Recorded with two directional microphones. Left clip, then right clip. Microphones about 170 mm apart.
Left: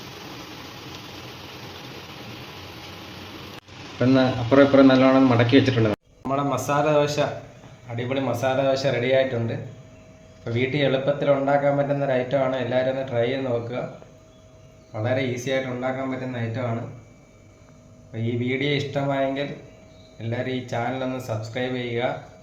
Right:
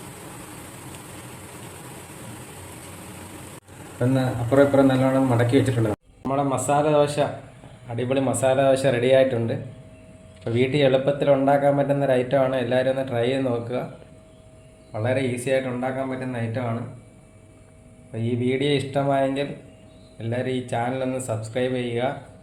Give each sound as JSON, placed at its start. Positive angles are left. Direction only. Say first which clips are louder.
{"t": 4.1, "sound": "a man's voice", "louder": "left 3 dB", "side_deg": 35}
{"t": 6.2, "sound": "a man's voice", "louder": "right 1 dB", "side_deg": -15}
{"t": 14.9, "sound": "a man's voice", "louder": "right 1 dB", "side_deg": -15}
{"t": 18.1, "sound": "a man's voice", "louder": "right 2 dB", "side_deg": -20}